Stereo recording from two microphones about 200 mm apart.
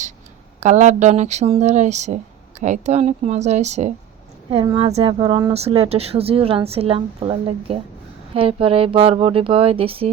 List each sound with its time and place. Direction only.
0.6 s speech: 35° right (ahead or behind)